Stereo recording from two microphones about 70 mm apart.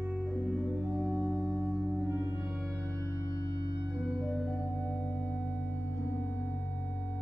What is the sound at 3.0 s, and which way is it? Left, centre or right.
Music, left.